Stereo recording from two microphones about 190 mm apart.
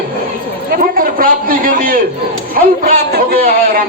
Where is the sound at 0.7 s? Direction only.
50° right (ahead or behind).